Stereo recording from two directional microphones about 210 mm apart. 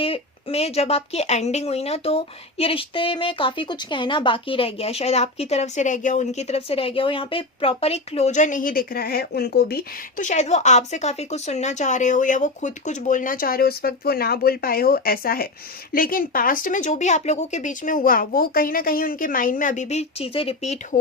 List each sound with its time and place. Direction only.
0.0 s speech: 25° left (ahead or behind)